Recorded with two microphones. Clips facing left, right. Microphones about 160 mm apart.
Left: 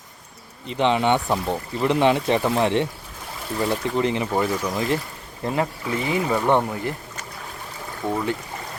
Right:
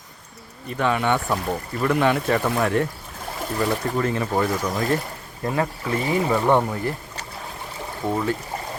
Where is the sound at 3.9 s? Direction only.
20° left (ahead or behind).